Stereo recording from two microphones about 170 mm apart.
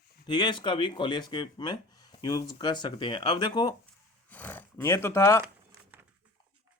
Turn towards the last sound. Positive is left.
turn(degrees=15)  # may be behind; listen again after turning